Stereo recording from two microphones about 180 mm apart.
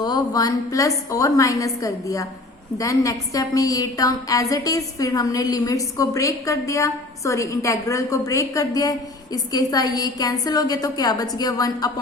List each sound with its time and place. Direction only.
0.0 s a woman's voice: 20° left (ahead or behind)